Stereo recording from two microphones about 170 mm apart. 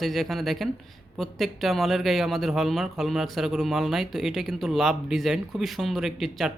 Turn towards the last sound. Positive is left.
turn(degrees=0)  # may be behind; listen again after turning